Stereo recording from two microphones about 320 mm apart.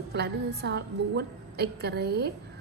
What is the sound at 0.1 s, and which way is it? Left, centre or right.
A woman's voice, right.